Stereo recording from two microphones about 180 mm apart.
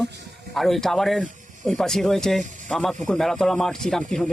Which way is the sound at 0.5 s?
Centre (ahead or behind).